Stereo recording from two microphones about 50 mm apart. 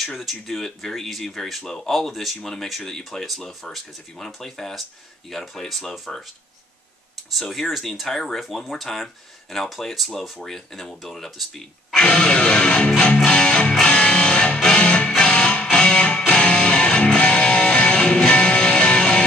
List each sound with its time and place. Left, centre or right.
0.0 s speech: centre
7.2 s speech: centre
12.0 s speech: centre
12.4 s music: centre